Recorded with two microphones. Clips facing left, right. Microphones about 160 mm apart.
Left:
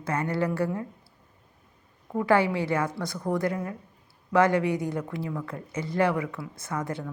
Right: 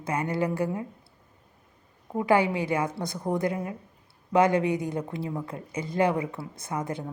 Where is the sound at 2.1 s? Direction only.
20° right (ahead or behind).